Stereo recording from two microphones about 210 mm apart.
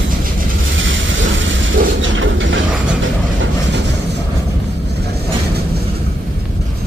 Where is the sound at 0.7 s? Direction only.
60° right (ahead or behind).